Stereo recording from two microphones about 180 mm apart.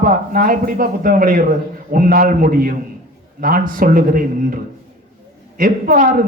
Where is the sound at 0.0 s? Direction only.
50° right (ahead or behind).